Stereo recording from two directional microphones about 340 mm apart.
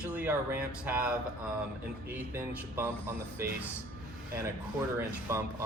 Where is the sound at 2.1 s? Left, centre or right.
Centre.